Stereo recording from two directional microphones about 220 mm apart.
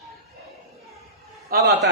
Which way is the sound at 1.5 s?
40° right (ahead or behind).